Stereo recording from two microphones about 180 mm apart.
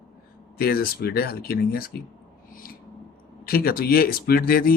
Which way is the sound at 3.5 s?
55° left (ahead or behind).